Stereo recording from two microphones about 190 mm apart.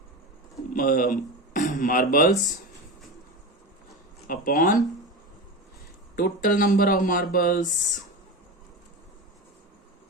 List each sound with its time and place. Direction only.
0.7 s speech: 45° left (ahead or behind)
4.3 s speech: 45° left (ahead or behind)
6.1 s speech: 50° left (ahead or behind)